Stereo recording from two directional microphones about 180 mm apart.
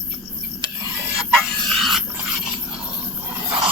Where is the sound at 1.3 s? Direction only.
Centre (ahead or behind).